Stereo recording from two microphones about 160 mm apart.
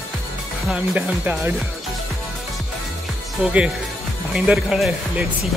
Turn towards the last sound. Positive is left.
turn(degrees=-5)  # may be behind; listen again after turning